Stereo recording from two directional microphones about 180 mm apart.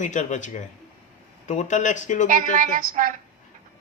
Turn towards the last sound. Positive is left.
turn(degrees=-50)  # may be behind; listen again after turning